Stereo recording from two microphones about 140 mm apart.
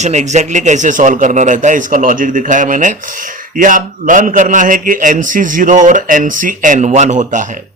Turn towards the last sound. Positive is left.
turn(degrees=-60)  # may be behind; listen again after turning